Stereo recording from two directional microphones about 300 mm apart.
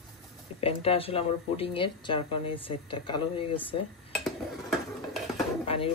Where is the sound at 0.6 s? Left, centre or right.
Centre.